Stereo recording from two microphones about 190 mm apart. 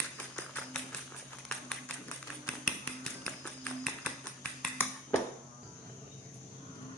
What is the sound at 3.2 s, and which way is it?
Music, centre (ahead or behind).